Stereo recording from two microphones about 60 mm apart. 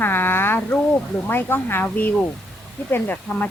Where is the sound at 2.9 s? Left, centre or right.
Left.